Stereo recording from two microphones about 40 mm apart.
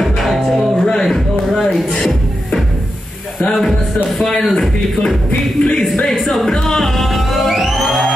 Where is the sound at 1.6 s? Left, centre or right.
Centre.